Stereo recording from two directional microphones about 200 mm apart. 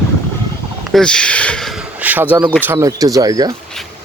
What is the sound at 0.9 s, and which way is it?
Speech, 5° left (ahead or behind).